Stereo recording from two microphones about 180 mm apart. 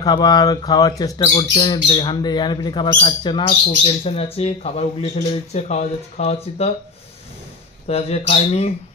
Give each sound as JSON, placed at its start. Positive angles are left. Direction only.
{"t": 0.0, "sound": "speech", "side_deg": 20}
{"t": 7.8, "sound": "speech", "side_deg": 35}